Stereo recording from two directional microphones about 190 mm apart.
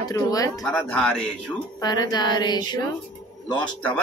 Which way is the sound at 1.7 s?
20° left (ahead or behind).